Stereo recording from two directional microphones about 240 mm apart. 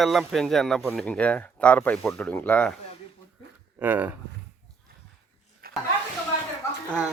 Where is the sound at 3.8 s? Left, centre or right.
Centre.